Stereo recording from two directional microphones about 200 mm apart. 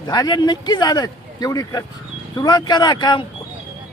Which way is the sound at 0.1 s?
20° left (ahead or behind).